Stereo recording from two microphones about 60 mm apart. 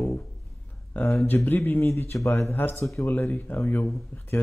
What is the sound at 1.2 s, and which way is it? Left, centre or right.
Speech, left.